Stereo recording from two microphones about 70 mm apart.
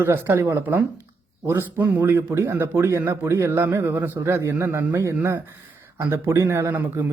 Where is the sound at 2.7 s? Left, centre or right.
Right.